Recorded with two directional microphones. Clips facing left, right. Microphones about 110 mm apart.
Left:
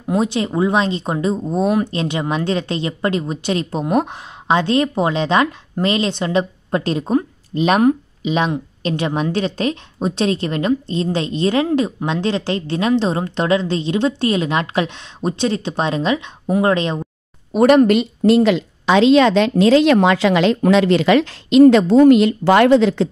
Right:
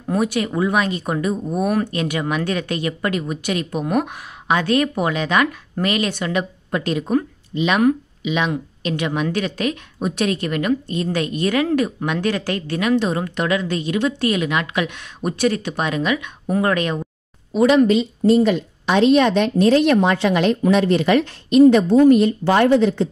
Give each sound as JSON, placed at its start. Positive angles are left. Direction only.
{"t": 0.1, "sound": "a woman's voice", "side_deg": 25}
{"t": 7.5, "sound": "a woman's voice", "side_deg": 40}
{"t": 17.5, "sound": "a woman's voice", "side_deg": 55}